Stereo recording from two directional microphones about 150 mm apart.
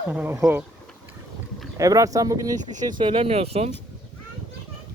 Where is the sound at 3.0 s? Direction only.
40° right (ahead or behind).